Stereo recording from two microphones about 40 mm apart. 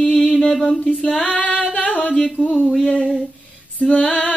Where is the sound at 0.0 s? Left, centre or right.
Left.